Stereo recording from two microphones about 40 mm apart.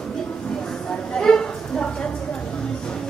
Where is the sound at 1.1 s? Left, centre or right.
Left.